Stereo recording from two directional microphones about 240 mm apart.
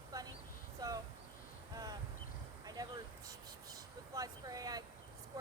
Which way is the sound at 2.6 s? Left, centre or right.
Centre.